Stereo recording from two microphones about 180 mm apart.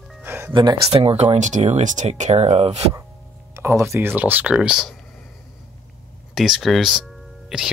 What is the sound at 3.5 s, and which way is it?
Speech, 15° right (ahead or behind).